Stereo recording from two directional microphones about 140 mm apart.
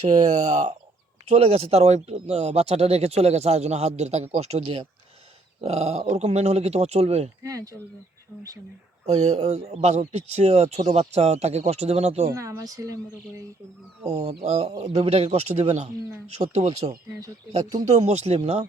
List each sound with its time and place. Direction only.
0.1 s speech: 60° right (ahead or behind)
1.3 s speech: 45° right (ahead or behind)
7.4 s speech: 25° right (ahead or behind)
9.0 s speech: 50° right (ahead or behind)
12.3 s speech: 25° right (ahead or behind)
14.1 s speech: 50° right (ahead or behind)